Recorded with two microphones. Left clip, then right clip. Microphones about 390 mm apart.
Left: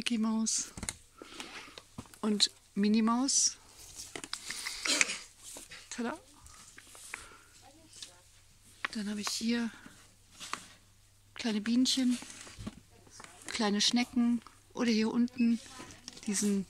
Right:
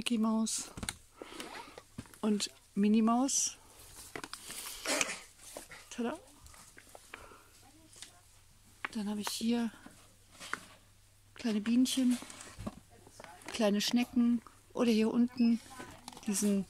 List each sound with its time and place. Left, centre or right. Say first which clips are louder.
0.0 s speech: even; centre
1.2 s sniff: even; centre
2.1 s speech: left 5 dB; centre
4.1 s a sound: left 3 dB; centre
5.9 s dog: even; centre
8.8 s speech: left 2 dB; centre
11.3 s speech: even; centre
13.5 s speech: left 1 dB; centre